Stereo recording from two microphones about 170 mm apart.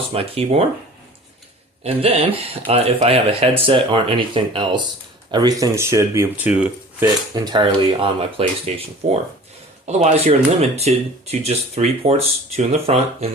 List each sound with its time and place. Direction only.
0.1 s speech: 35° right (ahead or behind)
1.8 s speech: 35° right (ahead or behind); by 7.1 s 10° right (ahead or behind)
7.3 s speech: 25° right (ahead or behind)